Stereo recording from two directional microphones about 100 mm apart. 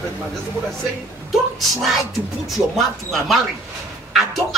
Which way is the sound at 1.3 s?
Centre (ahead or behind).